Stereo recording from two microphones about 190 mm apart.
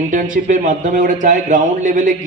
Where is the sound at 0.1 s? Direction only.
45° right (ahead or behind).